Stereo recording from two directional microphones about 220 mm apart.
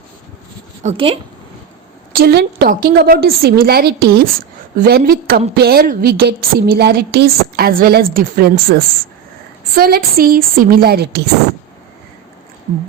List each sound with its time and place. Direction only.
0.8 s speech: 30° right (ahead or behind)
2.1 s a woman's voice: 50° right (ahead or behind)